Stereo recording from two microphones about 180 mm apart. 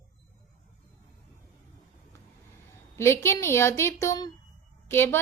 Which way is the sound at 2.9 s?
15° left (ahead or behind).